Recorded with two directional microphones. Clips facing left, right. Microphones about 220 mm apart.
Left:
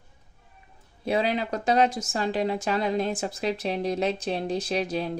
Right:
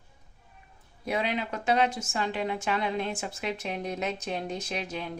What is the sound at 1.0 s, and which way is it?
Speech, 30° left (ahead or behind).